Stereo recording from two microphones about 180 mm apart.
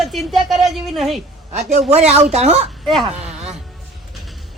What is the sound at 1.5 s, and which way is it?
Speech, 40° right (ahead or behind).